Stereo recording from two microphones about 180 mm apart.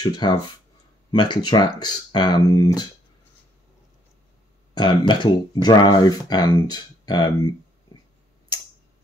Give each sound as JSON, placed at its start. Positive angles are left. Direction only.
{"t": 0.0, "sound": "speech", "side_deg": 25}
{"t": 4.7, "sound": "speech", "side_deg": 25}